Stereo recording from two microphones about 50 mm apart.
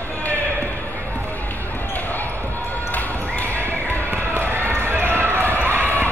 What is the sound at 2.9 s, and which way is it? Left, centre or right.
Basketball bounce, left.